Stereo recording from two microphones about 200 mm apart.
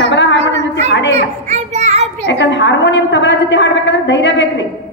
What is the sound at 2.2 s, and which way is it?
A woman's voice, 65° left (ahead or behind).